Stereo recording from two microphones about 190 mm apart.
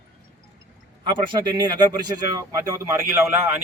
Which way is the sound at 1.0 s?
25° right (ahead or behind).